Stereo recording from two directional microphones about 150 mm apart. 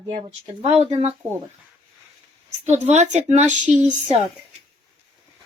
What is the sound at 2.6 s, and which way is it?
Speech, 50° right (ahead or behind).